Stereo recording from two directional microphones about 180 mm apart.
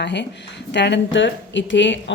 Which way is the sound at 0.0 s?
75° left (ahead or behind).